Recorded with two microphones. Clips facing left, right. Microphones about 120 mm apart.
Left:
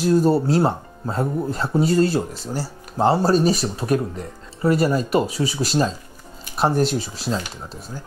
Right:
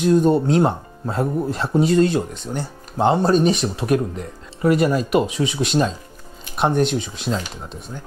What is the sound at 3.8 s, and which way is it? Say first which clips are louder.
Speech: right 2 dB; 35° left (ahead or behind).